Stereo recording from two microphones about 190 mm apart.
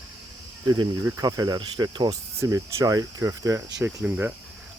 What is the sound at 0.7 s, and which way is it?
Speech, 20° right (ahead or behind).